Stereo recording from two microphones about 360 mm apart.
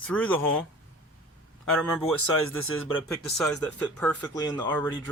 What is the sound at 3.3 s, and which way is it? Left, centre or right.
Speech, centre.